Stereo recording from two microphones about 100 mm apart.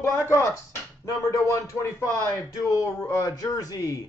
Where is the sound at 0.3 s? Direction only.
30° left (ahead or behind).